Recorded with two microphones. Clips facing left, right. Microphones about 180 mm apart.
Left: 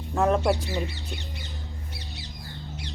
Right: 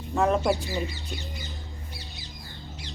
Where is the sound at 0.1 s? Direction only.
Centre (ahead or behind).